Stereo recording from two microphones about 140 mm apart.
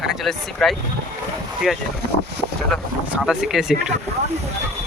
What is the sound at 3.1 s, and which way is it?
Speech, 5° right (ahead or behind).